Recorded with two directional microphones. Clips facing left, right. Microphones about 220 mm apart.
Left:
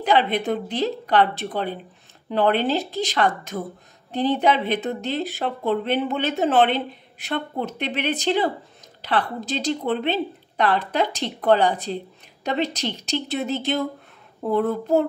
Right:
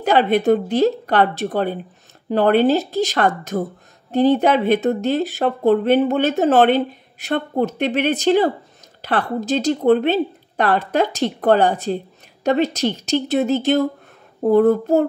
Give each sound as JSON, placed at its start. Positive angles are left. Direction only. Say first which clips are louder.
{"t": 0.0, "sound": "speech", "louder": "right 5 dB", "side_deg": -45}